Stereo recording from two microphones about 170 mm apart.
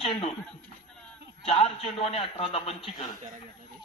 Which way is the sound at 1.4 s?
40° left (ahead or behind).